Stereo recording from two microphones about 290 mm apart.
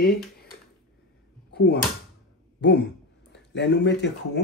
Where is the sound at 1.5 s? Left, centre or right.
Left.